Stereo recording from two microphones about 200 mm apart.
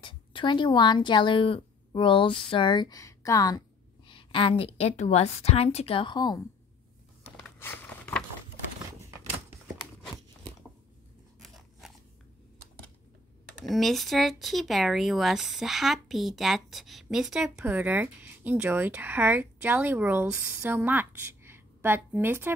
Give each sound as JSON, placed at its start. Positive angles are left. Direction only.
{"t": 0.0, "sound": "speech", "side_deg": 25}
{"t": 7.2, "sound": "a sound", "side_deg": 10}
{"t": 11.4, "sound": "crunch", "side_deg": 0}
{"t": 13.7, "sound": "speech", "side_deg": 0}